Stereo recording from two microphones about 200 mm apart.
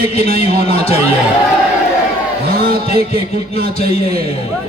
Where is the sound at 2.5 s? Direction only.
50° right (ahead or behind).